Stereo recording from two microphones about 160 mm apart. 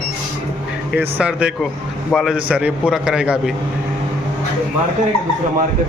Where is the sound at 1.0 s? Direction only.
10° right (ahead or behind).